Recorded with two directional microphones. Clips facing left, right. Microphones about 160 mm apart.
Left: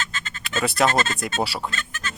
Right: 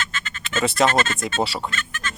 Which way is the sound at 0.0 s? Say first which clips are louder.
Right 1 dB; 35° left (ahead or behind).